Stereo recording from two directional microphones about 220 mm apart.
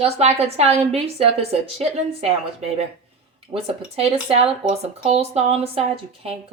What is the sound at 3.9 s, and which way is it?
Speech, 25° right (ahead or behind).